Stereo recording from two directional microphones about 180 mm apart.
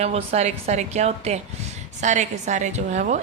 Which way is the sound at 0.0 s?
35° right (ahead or behind).